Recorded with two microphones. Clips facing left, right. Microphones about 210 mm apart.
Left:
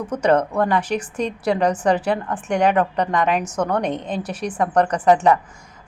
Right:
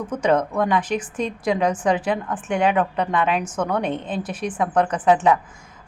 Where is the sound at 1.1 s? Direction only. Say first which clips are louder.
Left 2 dB; 5° right (ahead or behind).